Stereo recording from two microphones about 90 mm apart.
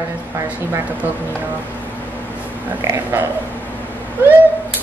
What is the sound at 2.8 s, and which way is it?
Speech, 30° right (ahead or behind).